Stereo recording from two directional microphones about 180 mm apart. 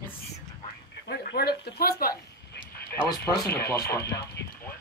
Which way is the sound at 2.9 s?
15° left (ahead or behind).